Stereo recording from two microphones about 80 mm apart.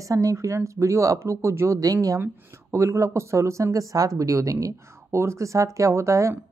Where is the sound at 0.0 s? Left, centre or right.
Right.